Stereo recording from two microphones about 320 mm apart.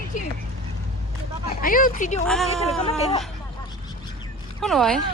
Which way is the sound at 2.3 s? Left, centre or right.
Centre.